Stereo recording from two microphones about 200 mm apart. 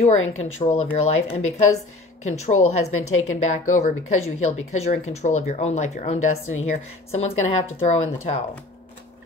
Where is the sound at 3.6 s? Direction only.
35° left (ahead or behind).